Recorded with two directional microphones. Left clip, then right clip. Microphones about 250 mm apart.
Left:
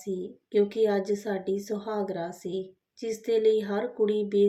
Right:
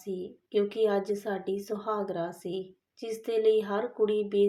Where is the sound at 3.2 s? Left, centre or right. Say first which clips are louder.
Left 2 dB; right.